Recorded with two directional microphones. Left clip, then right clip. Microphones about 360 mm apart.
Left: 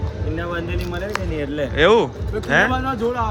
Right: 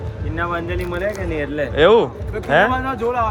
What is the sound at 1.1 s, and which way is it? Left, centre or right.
Speech, centre.